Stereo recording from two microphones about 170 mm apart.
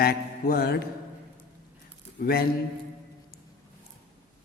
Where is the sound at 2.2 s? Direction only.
60° left (ahead or behind).